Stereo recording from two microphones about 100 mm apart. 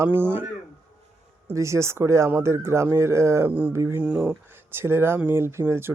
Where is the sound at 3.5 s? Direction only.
15° right (ahead or behind).